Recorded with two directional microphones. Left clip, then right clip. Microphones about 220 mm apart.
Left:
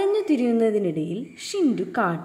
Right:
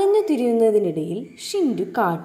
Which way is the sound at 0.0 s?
10° left (ahead or behind).